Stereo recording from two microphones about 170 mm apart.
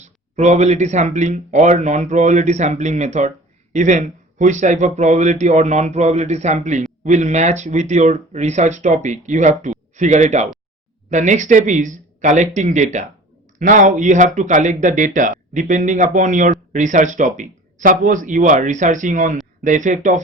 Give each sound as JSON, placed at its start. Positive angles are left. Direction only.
{"t": 0.0, "sound": "a man's voice", "side_deg": -40}